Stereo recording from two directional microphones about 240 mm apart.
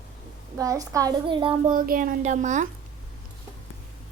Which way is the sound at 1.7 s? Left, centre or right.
Right.